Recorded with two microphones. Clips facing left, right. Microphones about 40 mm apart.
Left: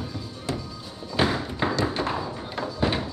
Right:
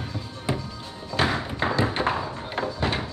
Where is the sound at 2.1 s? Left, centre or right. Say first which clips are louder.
Right 1 dB; centre.